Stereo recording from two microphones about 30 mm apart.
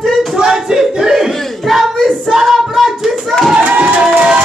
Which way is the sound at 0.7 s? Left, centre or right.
Right.